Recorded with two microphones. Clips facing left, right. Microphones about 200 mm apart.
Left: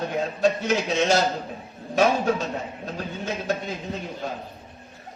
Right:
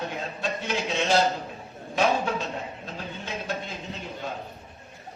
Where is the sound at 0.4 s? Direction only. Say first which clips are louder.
Left 7 dB; 45° left (ahead or behind).